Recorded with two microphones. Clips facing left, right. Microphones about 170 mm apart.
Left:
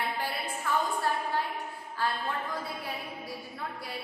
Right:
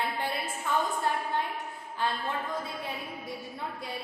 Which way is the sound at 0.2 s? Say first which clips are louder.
Right 1 dB; 20° right (ahead or behind).